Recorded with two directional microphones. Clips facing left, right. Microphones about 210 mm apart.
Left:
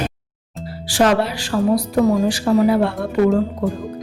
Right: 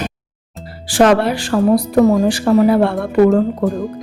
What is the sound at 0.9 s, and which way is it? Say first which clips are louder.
Speech: right 4 dB; 55° right (ahead or behind).